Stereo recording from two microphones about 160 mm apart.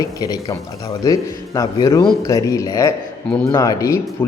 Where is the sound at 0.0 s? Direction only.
20° left (ahead or behind).